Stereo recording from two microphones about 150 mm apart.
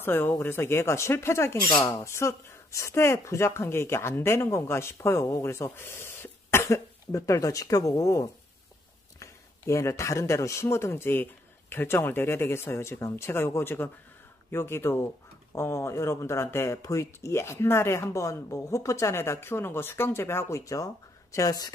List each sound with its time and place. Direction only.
0.0 s speech: 15° left (ahead or behind)